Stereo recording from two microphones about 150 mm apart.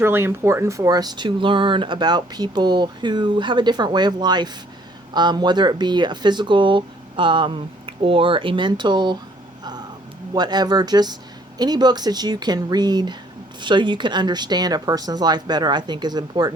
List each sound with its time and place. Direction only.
0.0 s speech: 15° right (ahead or behind)
10.3 s speech: 30° right (ahead or behind)